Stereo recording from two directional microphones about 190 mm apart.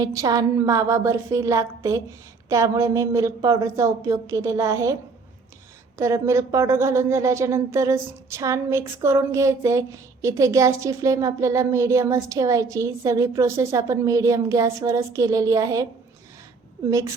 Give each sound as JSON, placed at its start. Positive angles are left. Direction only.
{"t": 0.0, "sound": "a woman's voice", "side_deg": -20}
{"t": 6.0, "sound": "a woman's voice", "side_deg": -15}
{"t": 16.9, "sound": "a woman's voice", "side_deg": -15}